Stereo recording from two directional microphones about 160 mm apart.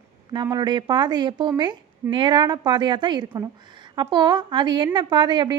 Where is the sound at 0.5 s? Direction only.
30° right (ahead or behind).